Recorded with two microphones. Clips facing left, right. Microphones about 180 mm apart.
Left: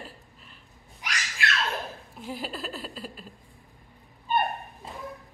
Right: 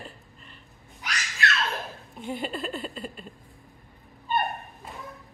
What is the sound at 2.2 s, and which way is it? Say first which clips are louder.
Speech: right 4 dB; centre (ahead or behind).